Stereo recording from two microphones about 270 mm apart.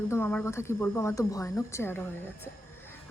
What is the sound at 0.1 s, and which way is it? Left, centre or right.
A woman's voice, centre.